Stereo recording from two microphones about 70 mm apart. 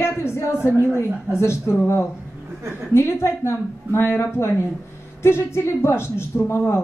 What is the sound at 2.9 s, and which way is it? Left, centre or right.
Speech, left.